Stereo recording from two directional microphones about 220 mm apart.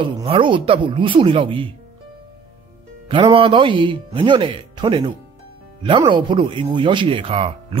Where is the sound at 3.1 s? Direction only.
25° right (ahead or behind).